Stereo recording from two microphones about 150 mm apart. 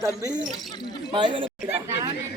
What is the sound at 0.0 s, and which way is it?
Speech, 25° right (ahead or behind).